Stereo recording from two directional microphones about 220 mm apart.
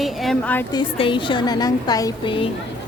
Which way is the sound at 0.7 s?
20° left (ahead or behind).